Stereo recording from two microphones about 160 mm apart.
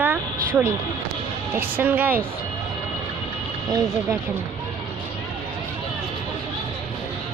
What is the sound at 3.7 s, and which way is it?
Speech, 25° right (ahead or behind).